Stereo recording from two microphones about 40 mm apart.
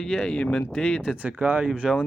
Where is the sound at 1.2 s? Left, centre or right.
Right.